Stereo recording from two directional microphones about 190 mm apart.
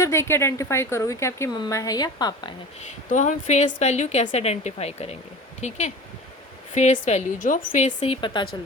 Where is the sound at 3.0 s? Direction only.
40° left (ahead or behind); by 8.4 s 25° left (ahead or behind).